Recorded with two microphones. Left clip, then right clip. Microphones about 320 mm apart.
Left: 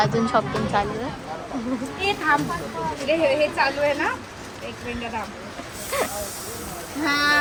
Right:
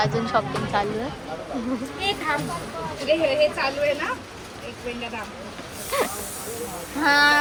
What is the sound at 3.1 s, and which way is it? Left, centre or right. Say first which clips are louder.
Speech: right 1 dB; centre.